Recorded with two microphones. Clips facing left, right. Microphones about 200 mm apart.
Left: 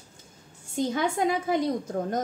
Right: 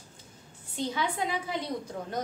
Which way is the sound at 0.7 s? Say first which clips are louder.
Left 5 dB; 45° left (ahead or behind).